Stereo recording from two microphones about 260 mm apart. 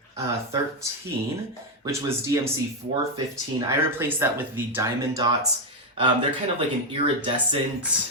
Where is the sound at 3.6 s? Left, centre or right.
Centre.